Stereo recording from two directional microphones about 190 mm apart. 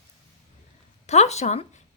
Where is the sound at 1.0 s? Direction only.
35° left (ahead or behind).